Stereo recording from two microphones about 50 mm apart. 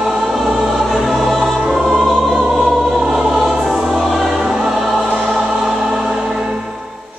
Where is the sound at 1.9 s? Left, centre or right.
Centre.